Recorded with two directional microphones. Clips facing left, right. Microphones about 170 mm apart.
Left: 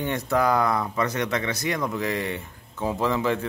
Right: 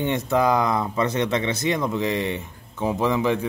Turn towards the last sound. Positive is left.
turn(degrees=-15)  # may be behind; listen again after turning